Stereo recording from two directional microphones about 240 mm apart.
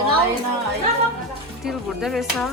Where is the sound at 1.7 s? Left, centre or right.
Centre.